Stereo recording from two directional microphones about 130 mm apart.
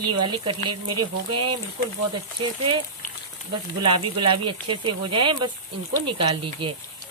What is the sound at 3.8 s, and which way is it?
Speech, 40° right (ahead or behind).